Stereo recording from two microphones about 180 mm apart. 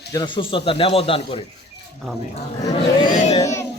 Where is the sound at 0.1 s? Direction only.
25° left (ahead or behind).